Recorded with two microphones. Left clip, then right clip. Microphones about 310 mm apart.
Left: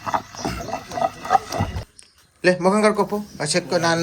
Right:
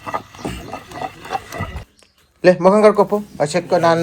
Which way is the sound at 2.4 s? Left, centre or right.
Centre.